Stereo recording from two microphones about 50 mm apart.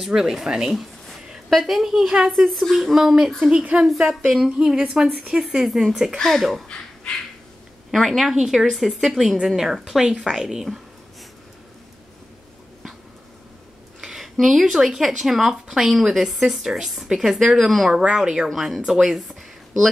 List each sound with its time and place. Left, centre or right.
0.0 s a woman's voice: centre
6.1 s speech: centre
7.1 s speech: centre
7.9 s speech: centre
14.0 s a sound: centre
14.4 s speech: centre
17.9 s a woman's voice: centre
18.5 s speech: centre